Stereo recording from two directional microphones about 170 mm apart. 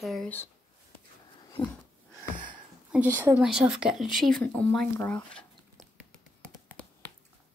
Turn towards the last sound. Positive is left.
turn(degrees=5)  # may be behind; listen again after turning